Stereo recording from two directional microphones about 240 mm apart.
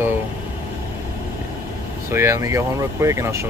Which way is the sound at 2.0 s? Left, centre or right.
Centre.